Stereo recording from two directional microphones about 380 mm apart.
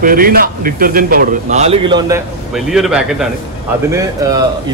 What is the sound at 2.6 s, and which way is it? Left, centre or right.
Speech, centre.